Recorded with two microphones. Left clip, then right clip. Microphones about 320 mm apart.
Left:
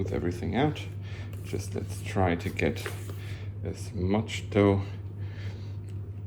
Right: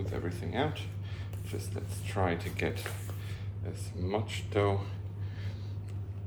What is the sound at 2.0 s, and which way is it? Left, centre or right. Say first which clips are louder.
Speech: left 4 dB; centre.